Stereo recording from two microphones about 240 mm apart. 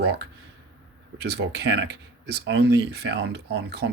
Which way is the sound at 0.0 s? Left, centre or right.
Right.